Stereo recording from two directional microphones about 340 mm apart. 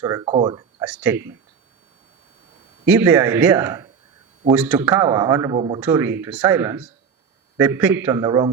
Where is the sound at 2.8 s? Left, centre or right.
Centre.